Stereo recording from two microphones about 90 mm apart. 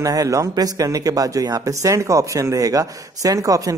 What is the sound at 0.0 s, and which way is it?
Speech, 40° right (ahead or behind).